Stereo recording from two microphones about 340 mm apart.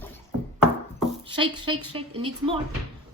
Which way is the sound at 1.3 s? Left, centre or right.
Centre.